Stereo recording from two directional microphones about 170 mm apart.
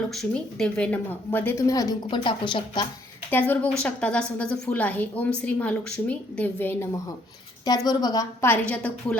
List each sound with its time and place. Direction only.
0.1 s a woman's voice: 5° left (ahead or behind); by 2.8 s 30° left (ahead or behind)
3.2 s a woman's voice: 10° left (ahead or behind)
7.9 s a woman's voice: 20° left (ahead or behind)